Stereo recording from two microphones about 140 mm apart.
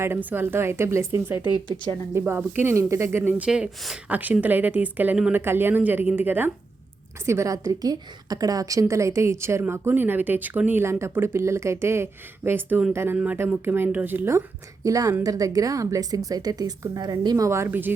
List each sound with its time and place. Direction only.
0.0 s speech: 15° right (ahead or behind)
1.7 s a woman's voice: 35° right (ahead or behind)
2.1 s a woman's voice: 15° right (ahead or behind)